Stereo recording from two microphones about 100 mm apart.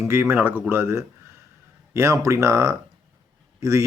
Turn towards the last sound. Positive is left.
turn(degrees=-30)  # may be behind; listen again after turning